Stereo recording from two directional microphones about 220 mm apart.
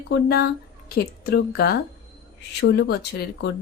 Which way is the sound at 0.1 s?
45° left (ahead or behind).